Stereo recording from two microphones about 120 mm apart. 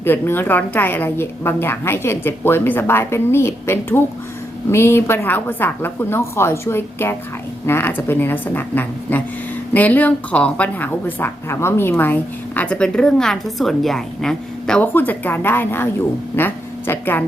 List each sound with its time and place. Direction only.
0.0 s a woman's voice: 20° left (ahead or behind)